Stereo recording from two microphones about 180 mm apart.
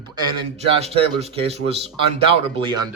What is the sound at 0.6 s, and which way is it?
Speech, 35° right (ahead or behind).